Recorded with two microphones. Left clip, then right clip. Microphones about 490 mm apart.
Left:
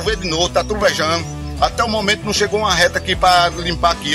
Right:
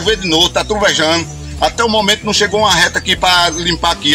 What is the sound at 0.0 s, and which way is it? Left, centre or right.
Speech, left.